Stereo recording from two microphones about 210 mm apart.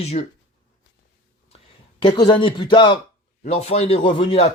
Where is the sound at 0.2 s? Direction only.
30° left (ahead or behind).